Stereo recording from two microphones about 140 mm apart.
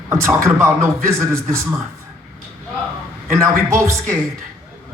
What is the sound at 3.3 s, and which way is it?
Music, 20° right (ahead or behind).